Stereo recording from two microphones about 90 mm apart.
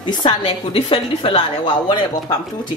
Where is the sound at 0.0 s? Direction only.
60° left (ahead or behind); by 1.4 s 90° left.